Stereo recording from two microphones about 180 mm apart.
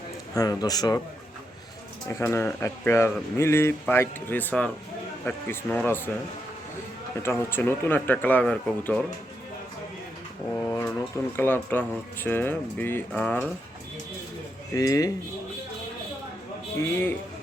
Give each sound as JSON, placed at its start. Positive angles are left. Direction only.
{"t": 0.3, "sound": "a man's voice", "side_deg": 20}
{"t": 2.0, "sound": "speech", "side_deg": 15}
{"t": 7.2, "sound": "speech", "side_deg": 15}
{"t": 10.5, "sound": "a sound", "side_deg": 10}
{"t": 11.3, "sound": "speech", "side_deg": 10}
{"t": 14.8, "sound": "a man's voice", "side_deg": 20}
{"t": 16.7, "sound": "speech", "side_deg": 10}